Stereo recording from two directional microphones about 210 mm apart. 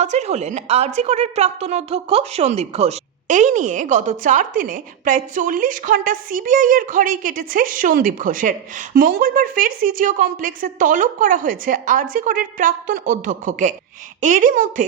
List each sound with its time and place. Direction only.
0.0 s a woman's voice: 35° right (ahead or behind)